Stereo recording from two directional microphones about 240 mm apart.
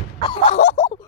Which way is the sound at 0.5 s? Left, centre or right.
Left.